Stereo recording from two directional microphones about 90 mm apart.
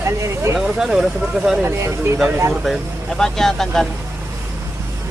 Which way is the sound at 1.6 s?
30° right (ahead or behind).